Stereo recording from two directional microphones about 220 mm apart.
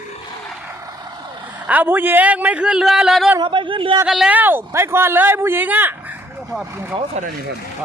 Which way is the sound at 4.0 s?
5° right (ahead or behind).